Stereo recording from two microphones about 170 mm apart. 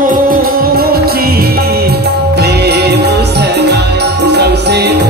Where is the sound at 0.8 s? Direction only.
65° right (ahead or behind).